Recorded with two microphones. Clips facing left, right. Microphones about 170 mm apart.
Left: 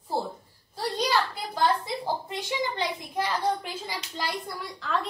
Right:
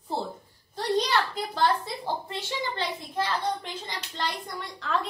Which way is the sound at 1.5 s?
15° left (ahead or behind).